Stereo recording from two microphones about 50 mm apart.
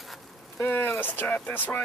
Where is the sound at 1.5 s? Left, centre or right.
Left.